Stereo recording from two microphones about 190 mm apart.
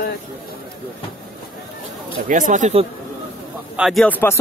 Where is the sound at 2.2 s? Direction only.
45° right (ahead or behind).